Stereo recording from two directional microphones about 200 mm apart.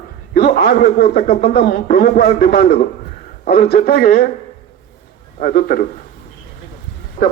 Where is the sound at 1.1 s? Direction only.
35° left (ahead or behind).